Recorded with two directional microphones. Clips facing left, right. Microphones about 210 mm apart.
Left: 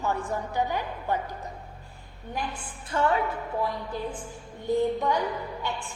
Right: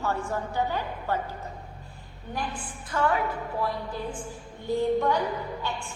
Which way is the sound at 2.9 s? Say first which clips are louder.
Left 1 dB; 25° left (ahead or behind).